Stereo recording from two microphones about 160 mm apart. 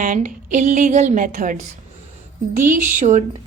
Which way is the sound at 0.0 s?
55° right (ahead or behind).